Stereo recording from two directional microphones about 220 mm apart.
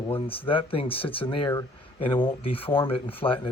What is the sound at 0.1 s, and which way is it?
Speech, 25° left (ahead or behind).